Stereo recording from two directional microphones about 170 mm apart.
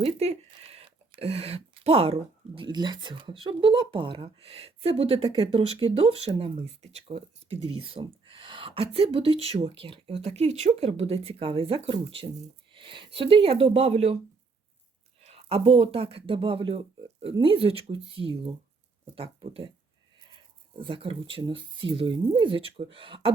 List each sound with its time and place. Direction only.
0.0 s a sound: 35° right (ahead or behind)
2.6 s speech: 25° right (ahead or behind)
15.2 s speech: 35° right (ahead or behind)
20.7 s speech: 30° right (ahead or behind)